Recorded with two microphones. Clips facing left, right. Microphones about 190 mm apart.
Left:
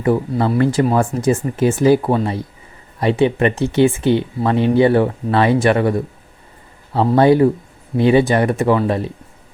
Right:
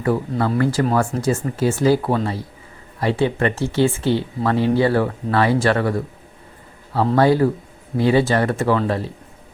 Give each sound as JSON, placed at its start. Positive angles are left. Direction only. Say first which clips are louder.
{"t": 0.0, "sound": "speech", "louder": "left 3 dB", "side_deg": 20}
{"t": 7.2, "sound": "speech", "louder": "left 4 dB", "side_deg": 20}